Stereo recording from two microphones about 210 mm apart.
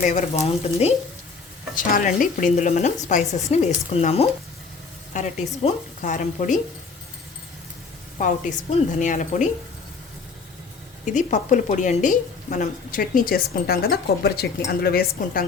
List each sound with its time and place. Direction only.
0.0 s speech: 35° left (ahead or behind)
1.7 s speech: 40° left (ahead or behind)
8.2 s speech: 35° left (ahead or behind)
11.0 s a woman's voice: 35° left (ahead or behind)